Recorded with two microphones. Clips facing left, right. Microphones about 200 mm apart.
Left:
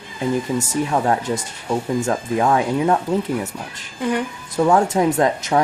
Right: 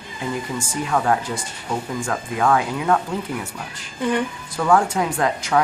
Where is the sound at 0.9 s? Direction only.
25° left (ahead or behind).